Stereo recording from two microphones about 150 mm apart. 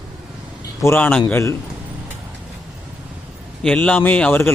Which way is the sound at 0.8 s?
15° left (ahead or behind).